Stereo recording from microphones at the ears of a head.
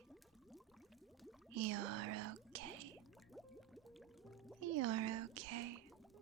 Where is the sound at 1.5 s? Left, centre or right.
Right.